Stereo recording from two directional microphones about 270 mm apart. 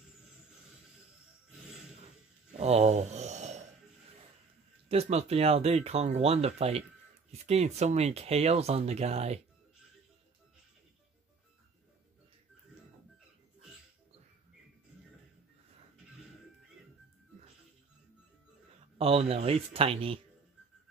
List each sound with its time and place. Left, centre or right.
2.6 s a sound: right
4.8 s speech: right
18.9 s speech: right